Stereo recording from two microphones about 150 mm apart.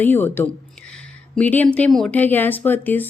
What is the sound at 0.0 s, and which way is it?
A woman's voice, 15° left (ahead or behind).